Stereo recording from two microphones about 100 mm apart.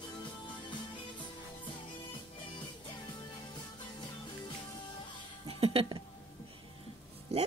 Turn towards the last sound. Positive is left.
turn(degrees=-90)